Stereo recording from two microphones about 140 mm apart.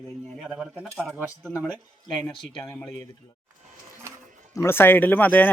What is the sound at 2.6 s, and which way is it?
Speech, 15° left (ahead or behind).